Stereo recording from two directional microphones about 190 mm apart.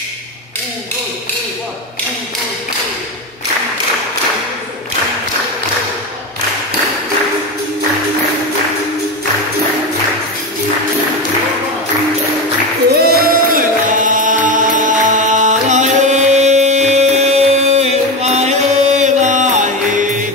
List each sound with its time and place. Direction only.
13.0 s music: 50° right (ahead or behind)